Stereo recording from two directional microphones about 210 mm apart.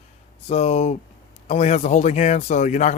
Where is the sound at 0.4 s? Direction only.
30° left (ahead or behind).